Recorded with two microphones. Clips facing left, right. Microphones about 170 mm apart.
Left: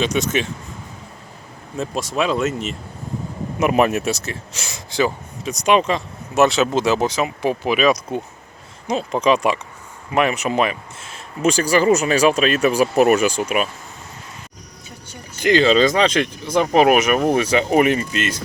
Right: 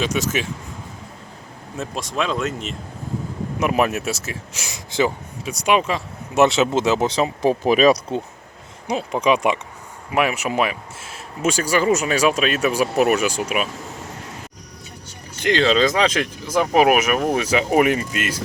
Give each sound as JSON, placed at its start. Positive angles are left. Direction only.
{"t": 0.0, "sound": "speech", "side_deg": -5}
{"t": 1.8, "sound": "speech", "side_deg": 0}
{"t": 5.5, "sound": "speech", "side_deg": -10}
{"t": 6.3, "sound": "speech", "side_deg": -20}
{"t": 7.2, "sound": "speech", "side_deg": -35}
{"t": 8.9, "sound": "speech", "side_deg": -10}
{"t": 15.4, "sound": "speech", "side_deg": 5}